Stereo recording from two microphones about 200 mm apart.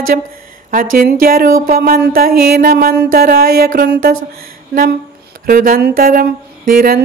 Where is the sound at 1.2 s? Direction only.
45° right (ahead or behind).